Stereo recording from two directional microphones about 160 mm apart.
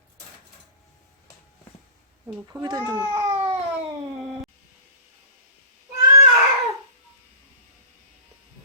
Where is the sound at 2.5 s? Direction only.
25° right (ahead or behind).